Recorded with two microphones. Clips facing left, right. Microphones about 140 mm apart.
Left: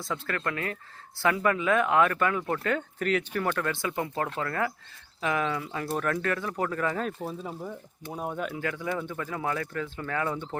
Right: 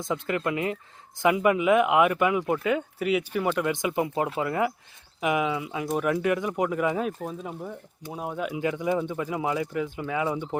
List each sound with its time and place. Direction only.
0.0 s speech: 20° right (ahead or behind)